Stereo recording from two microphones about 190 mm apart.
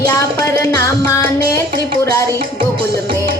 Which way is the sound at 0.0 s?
20° left (ahead or behind).